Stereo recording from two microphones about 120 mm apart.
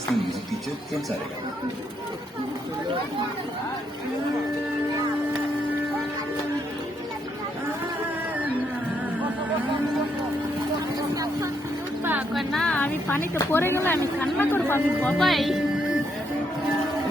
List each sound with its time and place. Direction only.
11.1 s speech: 30° right (ahead or behind)
12.3 s a woman's voice: centre (ahead or behind)
12.7 s speech: 15° left (ahead or behind)
15.2 s a woman's voice: centre (ahead or behind)